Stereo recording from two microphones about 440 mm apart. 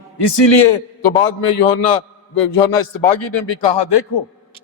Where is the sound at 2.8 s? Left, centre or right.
Left.